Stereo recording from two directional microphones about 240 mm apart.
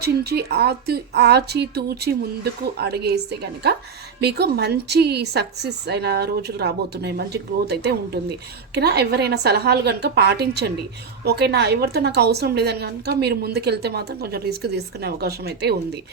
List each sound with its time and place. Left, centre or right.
0.0 s a woman's voice: right